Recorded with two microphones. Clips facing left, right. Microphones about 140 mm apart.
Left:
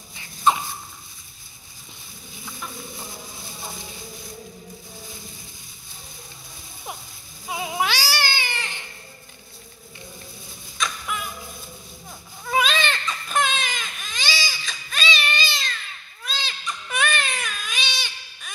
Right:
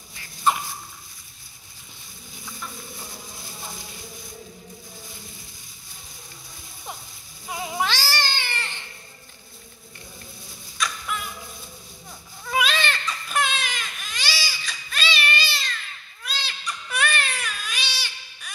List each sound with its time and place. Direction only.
7.4 s cat: 15° left (ahead or behind)
11.1 s a sound: 15° left (ahead or behind)
12.5 s baby cry: 20° left (ahead or behind)